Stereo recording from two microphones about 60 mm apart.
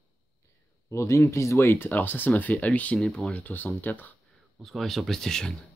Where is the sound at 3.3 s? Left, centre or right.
Left.